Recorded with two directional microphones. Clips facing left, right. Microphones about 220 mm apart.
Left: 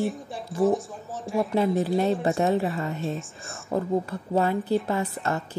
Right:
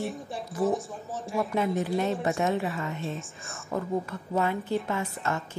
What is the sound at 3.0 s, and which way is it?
Speech, centre (ahead or behind).